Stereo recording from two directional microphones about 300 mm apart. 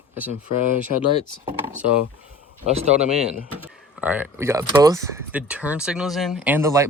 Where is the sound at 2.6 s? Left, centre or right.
Right.